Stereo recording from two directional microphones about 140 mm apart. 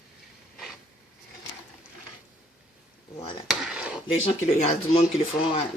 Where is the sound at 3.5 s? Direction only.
5° right (ahead or behind).